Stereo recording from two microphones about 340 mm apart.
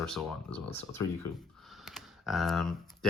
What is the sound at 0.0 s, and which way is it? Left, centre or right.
Speech, centre.